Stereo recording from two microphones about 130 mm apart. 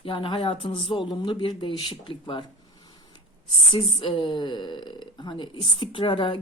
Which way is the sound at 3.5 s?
45° left (ahead or behind).